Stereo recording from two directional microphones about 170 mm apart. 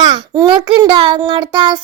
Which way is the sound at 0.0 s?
25° right (ahead or behind).